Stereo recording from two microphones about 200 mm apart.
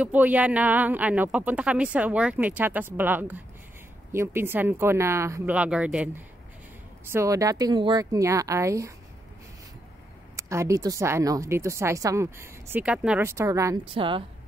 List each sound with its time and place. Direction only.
0.0 s a woman's voice: 10° right (ahead or behind)
10.3 s a woman's voice: 15° right (ahead or behind)
13.8 s a woman's voice: 25° right (ahead or behind)